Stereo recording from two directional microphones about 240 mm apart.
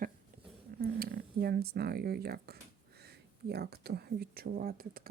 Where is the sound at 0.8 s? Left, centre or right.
Right.